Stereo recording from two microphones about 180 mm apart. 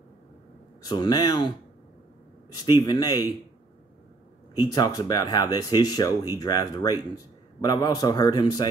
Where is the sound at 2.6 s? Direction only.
20° left (ahead or behind).